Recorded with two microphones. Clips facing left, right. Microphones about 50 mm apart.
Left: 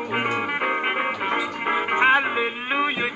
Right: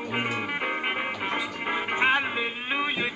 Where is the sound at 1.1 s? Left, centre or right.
Centre.